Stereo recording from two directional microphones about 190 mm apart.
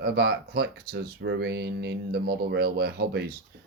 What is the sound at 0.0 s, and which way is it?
Speech, 55° right (ahead or behind).